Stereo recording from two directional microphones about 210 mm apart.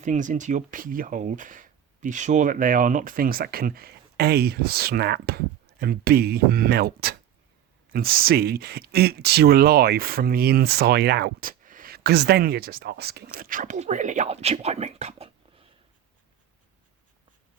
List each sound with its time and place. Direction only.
0.0 s speech: 35° right (ahead or behind)